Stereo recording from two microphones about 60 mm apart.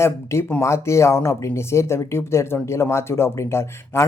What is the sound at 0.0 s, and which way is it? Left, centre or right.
Speech, left.